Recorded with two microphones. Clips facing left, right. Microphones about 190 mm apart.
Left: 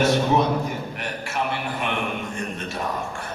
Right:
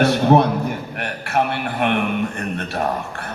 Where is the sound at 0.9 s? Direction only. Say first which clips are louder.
Right 6 dB; 60° right (ahead or behind).